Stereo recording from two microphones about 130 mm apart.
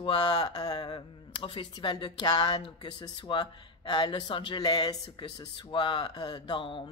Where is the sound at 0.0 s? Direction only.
35° left (ahead or behind).